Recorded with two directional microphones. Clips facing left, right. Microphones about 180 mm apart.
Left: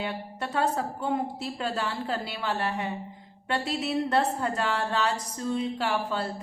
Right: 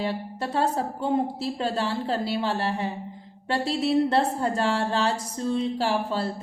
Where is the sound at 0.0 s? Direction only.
30° right (ahead or behind).